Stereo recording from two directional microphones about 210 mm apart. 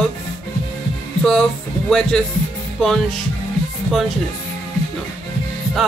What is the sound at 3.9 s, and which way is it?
Speech, centre (ahead or behind).